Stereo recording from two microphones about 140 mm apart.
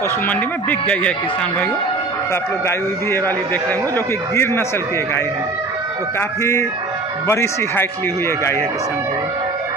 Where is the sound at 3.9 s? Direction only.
20° left (ahead or behind).